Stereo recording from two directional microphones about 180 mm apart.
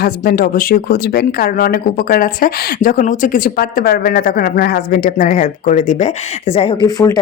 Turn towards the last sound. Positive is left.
turn(degrees=20)  # may be behind; listen again after turning